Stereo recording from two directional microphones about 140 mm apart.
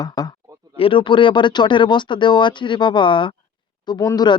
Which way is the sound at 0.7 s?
40° left (ahead or behind).